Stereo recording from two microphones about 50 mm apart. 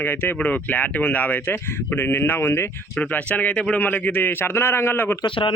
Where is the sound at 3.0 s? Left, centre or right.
Left.